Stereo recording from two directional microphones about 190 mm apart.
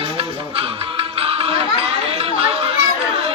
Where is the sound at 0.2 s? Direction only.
30° right (ahead or behind).